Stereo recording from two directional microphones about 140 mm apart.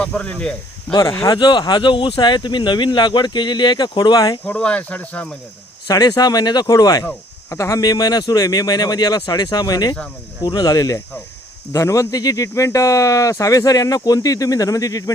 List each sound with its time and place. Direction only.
0.0 s speech: 10° left (ahead or behind)
0.9 s speech: 20° left (ahead or behind)
4.4 s speech: 10° left (ahead or behind)
5.9 s speech: 25° left (ahead or behind)